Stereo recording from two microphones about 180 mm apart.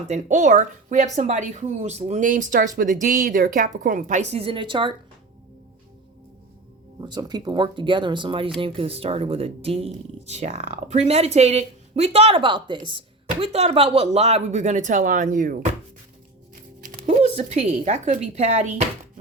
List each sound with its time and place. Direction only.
0.1 s speech: 45° right (ahead or behind); by 4.9 s 30° right (ahead or behind)
7.0 s speech: 20° right (ahead or behind); by 15.5 s 45° right (ahead or behind)
16.8 s speech: 45° right (ahead or behind)